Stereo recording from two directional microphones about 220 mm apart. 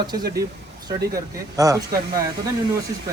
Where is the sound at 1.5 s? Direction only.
15° right (ahead or behind).